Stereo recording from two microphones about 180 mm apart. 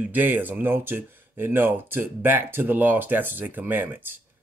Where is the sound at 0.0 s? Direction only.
10° right (ahead or behind).